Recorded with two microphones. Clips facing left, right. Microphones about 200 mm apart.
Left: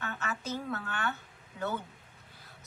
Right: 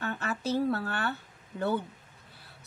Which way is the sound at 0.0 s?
35° right (ahead or behind).